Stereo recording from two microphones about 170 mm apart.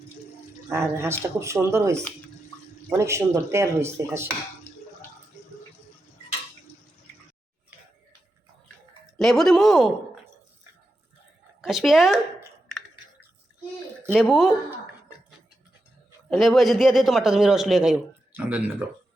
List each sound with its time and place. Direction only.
0.7 s speech: 15° right (ahead or behind)
3.0 s speech: 15° right (ahead or behind)
9.1 s a man's voice: centre (ahead or behind)
11.6 s speech: centre (ahead or behind)
14.1 s a man's voice: centre (ahead or behind)
16.3 s a man's voice: centre (ahead or behind)